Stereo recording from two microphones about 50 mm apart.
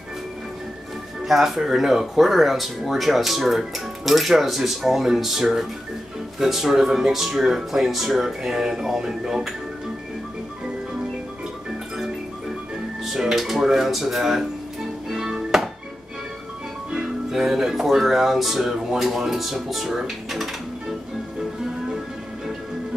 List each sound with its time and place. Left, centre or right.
1.2 s speech: centre
13.0 s speech: centre
15.0 s music: centre
16.9 s speech: centre